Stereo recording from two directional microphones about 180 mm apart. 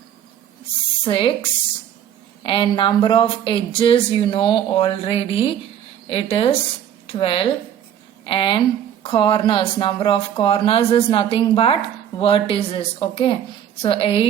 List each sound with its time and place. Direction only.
1.0 s speech: 30° left (ahead or behind)